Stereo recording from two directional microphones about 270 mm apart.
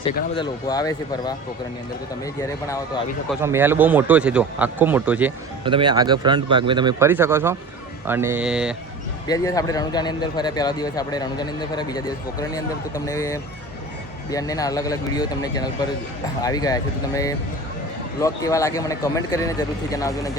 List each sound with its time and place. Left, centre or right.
0.0 s a man's voice: centre
3.4 s speech: centre
5.6 s speech: centre
9.2 s a man's voice: centre